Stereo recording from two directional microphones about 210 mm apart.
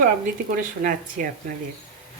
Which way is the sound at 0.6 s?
40° right (ahead or behind).